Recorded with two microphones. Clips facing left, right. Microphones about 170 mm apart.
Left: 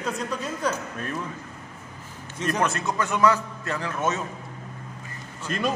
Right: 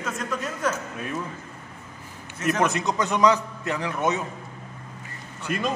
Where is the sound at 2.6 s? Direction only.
15° right (ahead or behind).